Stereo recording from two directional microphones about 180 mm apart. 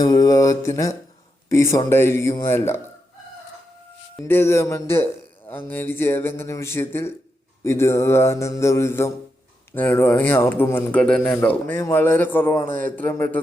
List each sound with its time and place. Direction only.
0.0 s mantra: 20° left (ahead or behind)
1.5 s a man's voice: 15° left (ahead or behind)
4.3 s a man's voice: 10° left (ahead or behind)